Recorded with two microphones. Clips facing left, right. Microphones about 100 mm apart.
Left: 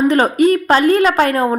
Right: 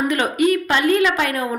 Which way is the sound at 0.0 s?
35° left (ahead or behind).